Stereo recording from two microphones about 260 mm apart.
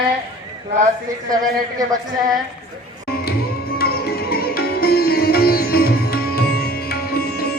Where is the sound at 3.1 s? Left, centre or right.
Left.